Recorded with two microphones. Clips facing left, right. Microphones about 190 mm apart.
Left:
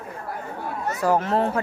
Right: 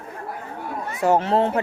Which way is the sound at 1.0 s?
25° right (ahead or behind).